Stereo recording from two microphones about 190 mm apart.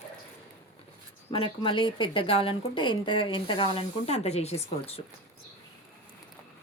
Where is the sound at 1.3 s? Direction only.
25° left (ahead or behind).